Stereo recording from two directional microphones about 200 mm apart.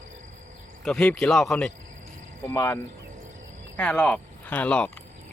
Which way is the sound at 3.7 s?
5° left (ahead or behind).